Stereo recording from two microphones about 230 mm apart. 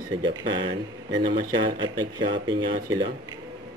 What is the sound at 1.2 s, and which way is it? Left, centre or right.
Speech, right.